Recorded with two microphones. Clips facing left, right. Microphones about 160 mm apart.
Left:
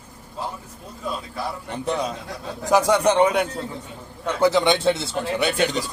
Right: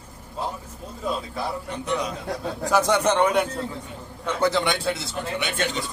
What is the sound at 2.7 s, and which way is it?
A man's voice, 15° left (ahead or behind).